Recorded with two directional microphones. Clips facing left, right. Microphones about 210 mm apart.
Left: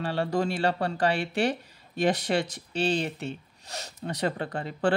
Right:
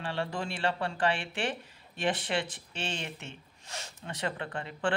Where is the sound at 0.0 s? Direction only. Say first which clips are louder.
Left 7 dB; 40° left (ahead or behind).